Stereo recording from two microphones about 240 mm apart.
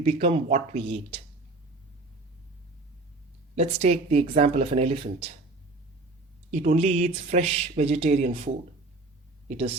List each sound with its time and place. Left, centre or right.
0.0 s speech: right
3.5 s speech: right
6.5 s speech: right
9.5 s speech: right